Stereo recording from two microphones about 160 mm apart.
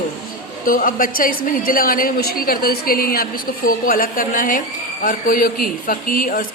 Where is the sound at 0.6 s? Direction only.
60° left (ahead or behind).